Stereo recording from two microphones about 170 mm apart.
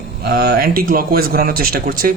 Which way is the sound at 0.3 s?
65° right (ahead or behind).